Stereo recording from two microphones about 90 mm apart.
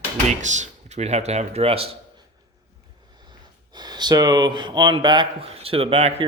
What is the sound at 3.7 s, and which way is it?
Speech, 50° right (ahead or behind).